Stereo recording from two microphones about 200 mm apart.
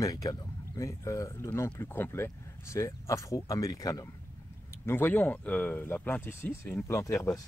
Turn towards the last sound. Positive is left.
turn(degrees=15)  # may be behind; listen again after turning